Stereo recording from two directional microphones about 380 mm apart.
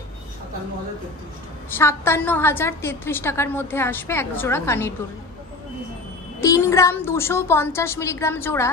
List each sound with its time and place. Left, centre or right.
1.8 s a woman's voice: centre
6.4 s a woman's voice: centre